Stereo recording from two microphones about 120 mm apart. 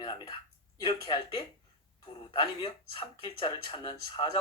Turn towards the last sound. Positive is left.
turn(degrees=40)  # may be behind; listen again after turning